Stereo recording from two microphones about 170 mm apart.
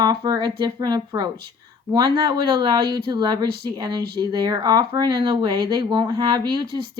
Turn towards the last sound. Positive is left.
turn(degrees=-25)  # may be behind; listen again after turning